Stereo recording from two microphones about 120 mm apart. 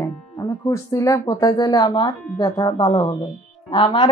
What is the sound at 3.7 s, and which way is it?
Speech, 45° left (ahead or behind).